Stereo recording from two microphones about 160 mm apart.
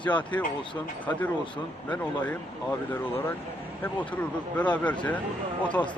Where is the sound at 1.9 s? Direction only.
10° left (ahead or behind).